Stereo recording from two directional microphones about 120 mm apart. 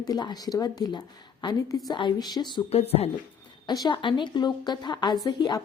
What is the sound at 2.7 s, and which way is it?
Speech, 55° left (ahead or behind).